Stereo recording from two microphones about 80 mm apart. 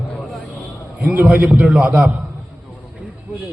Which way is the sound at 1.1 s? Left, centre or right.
Right.